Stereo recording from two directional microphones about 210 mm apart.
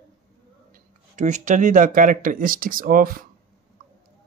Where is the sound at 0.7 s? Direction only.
35° right (ahead or behind).